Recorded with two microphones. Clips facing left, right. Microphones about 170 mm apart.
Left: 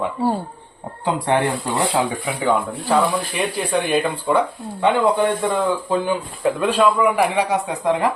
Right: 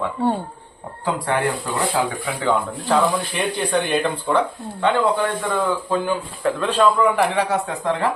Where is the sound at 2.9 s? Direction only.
5° left (ahead or behind).